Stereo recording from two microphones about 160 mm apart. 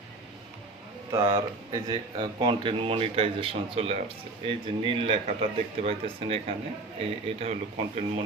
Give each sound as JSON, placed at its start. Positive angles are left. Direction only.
{"t": 1.2, "sound": "speech", "side_deg": -30}